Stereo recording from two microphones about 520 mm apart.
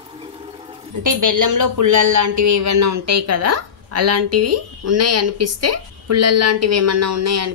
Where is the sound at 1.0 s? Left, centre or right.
Right.